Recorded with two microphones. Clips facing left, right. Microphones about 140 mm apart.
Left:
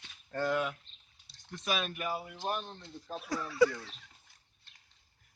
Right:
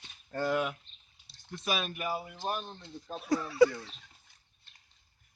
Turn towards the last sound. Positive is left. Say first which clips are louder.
# right 4 dB
turn(degrees=-25)  # may be behind; listen again after turning